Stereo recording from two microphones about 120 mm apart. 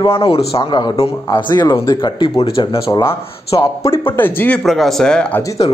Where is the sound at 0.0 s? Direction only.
50° left (ahead or behind).